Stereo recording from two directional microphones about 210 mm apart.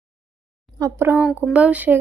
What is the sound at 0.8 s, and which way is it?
Speech, 10° right (ahead or behind).